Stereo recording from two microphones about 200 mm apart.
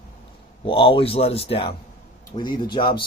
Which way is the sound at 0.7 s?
25° left (ahead or behind).